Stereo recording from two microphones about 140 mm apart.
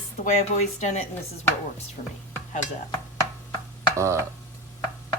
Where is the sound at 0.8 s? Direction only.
55° left (ahead or behind).